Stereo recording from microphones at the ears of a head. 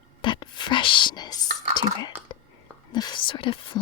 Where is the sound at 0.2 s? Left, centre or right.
Left.